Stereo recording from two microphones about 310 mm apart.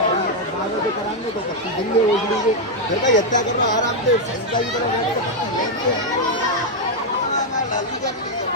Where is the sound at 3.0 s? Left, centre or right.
Left.